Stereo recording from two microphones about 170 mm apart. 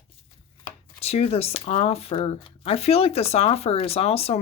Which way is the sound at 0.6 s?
35° left (ahead or behind).